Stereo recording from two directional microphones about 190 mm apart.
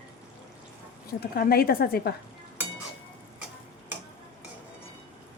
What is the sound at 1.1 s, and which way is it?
Speech, 55° left (ahead or behind).